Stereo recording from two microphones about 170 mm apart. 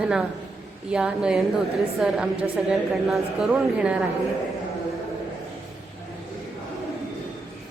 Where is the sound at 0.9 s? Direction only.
5° right (ahead or behind).